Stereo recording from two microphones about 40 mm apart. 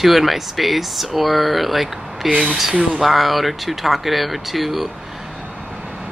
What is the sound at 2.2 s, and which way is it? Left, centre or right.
Speech, right.